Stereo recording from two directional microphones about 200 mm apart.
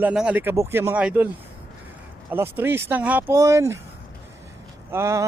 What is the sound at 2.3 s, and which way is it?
Speech, 10° right (ahead or behind).